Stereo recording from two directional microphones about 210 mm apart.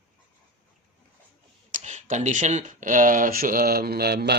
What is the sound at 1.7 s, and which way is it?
Speech, 35° right (ahead or behind).